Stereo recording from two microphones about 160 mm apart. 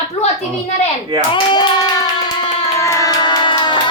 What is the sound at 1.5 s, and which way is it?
Hands, 25° left (ahead or behind).